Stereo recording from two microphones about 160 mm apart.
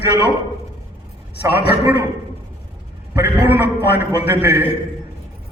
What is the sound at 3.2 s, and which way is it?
A man's voice, 90° left.